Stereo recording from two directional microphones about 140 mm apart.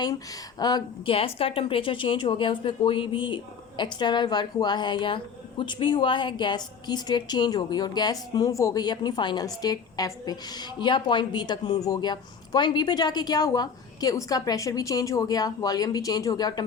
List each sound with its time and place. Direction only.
0.6 s speech: 30° left (ahead or behind)
1.1 s a woman's voice: 40° left (ahead or behind)